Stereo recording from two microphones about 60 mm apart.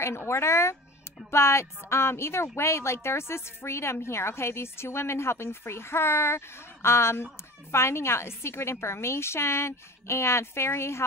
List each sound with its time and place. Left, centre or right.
0.3 s speech: left